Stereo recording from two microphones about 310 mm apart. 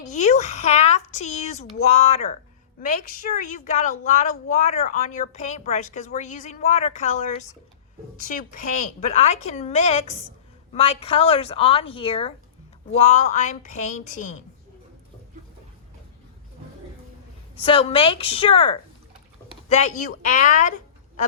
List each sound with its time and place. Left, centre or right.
0.1 s a sound: left
1.8 s a woman's voice: left
17.6 s a woman's voice: centre